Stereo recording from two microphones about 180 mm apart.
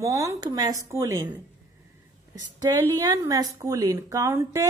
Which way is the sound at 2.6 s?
20° right (ahead or behind).